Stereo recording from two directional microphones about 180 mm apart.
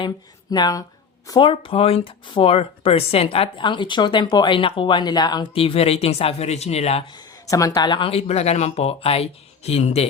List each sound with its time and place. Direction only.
0.5 s speech: 20° left (ahead or behind)
7.1 s speech: 20° left (ahead or behind)